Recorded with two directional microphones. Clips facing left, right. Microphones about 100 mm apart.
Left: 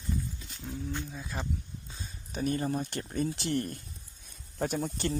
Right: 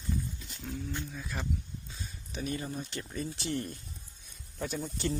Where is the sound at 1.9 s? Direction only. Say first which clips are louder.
Left 1 dB; 30° left (ahead or behind).